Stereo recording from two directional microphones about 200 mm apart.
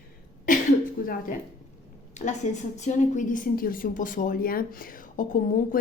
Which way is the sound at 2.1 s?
35° left (ahead or behind).